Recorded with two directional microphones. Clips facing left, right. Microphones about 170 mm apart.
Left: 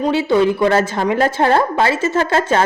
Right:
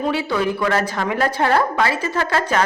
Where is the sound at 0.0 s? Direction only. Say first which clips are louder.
Left 6 dB; 25° left (ahead or behind).